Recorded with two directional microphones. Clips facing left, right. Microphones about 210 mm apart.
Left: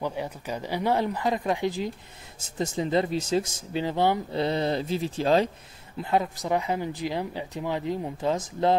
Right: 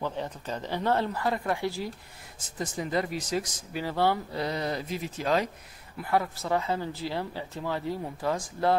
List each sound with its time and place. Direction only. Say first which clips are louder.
0.0 s speech: left 2 dB; 10° left (ahead or behind)